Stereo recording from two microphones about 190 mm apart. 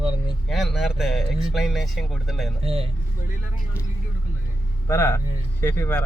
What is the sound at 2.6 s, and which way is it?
Speech, 30° right (ahead or behind).